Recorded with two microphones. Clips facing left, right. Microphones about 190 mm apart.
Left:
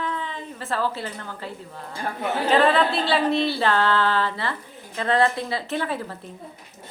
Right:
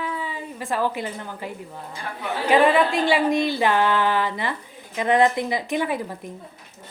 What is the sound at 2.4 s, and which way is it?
Speech, 15° right (ahead or behind).